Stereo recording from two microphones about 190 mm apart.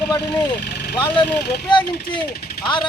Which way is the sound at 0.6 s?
60° left (ahead or behind).